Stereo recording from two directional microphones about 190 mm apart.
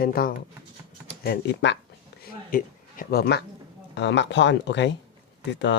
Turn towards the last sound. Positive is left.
turn(degrees=70)  # may be behind; listen again after turning